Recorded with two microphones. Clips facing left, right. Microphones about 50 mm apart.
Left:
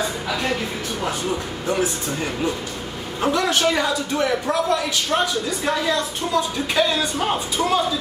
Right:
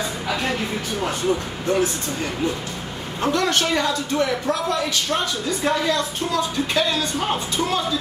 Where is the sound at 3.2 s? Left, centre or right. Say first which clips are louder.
Left 1 dB; centre.